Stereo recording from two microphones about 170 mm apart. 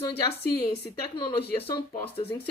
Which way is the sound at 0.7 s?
30° left (ahead or behind).